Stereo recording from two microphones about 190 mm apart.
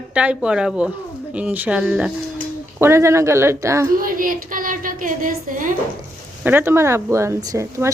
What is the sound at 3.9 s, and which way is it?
A woman's voice, 45° right (ahead or behind).